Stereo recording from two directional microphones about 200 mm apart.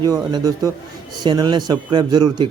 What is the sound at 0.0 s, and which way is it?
A man's voice, 20° right (ahead or behind).